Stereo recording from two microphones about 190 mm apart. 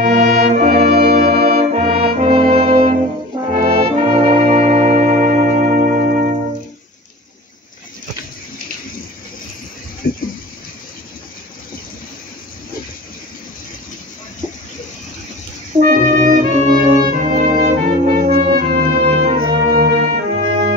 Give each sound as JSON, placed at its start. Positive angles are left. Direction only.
{"t": 0.0, "sound": "brass instrument", "side_deg": -35}
{"t": 1.2, "sound": "brass instrument", "side_deg": -35}
{"t": 10.0, "sound": "a sound", "side_deg": 50}
{"t": 15.8, "sound": "music", "side_deg": -45}
{"t": 17.1, "sound": "brass instrument", "side_deg": -45}
{"t": 17.6, "sound": "music", "side_deg": -45}
{"t": 18.9, "sound": "organ", "side_deg": -35}
{"t": 19.2, "sound": "music", "side_deg": -55}